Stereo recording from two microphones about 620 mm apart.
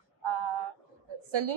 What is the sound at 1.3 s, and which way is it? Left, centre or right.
Speech, right.